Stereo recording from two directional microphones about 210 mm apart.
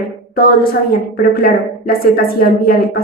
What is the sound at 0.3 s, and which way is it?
A woman's voice, 45° left (ahead or behind).